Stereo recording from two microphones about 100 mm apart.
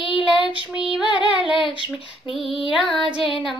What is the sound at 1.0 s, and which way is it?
Female singing, 50° left (ahead or behind).